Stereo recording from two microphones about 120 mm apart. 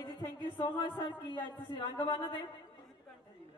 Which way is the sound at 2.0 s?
40° left (ahead or behind).